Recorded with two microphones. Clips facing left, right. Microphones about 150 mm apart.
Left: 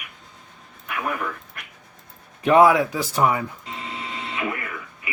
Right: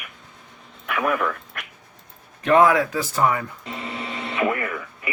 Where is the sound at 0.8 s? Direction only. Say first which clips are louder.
Right 5 dB; 80° right.